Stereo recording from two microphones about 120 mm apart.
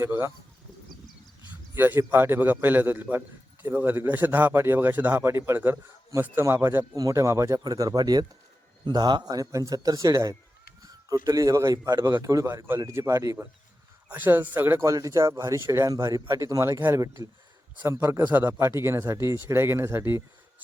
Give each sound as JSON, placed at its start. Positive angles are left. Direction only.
{"t": 0.0, "sound": "a man's voice", "side_deg": -20}
{"t": 1.7, "sound": "a man's voice", "side_deg": -20}